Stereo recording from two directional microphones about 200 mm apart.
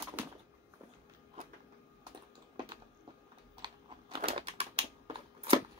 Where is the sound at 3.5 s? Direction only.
25° right (ahead or behind).